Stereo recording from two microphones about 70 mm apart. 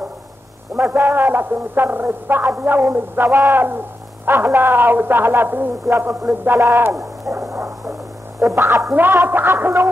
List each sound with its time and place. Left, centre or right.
0.7 s a man's voice: right
7.0 s owl: right
8.4 s a woman's voice: right
8.9 s a man's voice: right